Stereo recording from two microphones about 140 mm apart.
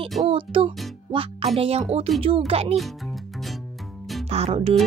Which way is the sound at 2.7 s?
Centre (ahead or behind).